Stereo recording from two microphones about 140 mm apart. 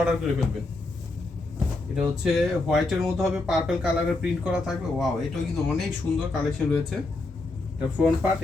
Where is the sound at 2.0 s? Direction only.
Centre (ahead or behind).